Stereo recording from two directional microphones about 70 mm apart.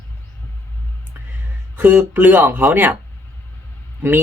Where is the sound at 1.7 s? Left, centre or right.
Right.